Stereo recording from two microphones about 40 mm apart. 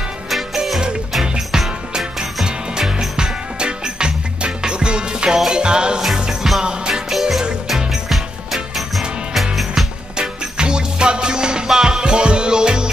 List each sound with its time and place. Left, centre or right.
1.2 s music: right
6.9 s music: centre
10.1 s music: centre